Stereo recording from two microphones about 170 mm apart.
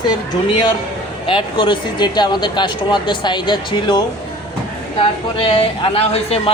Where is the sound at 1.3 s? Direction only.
30° left (ahead or behind).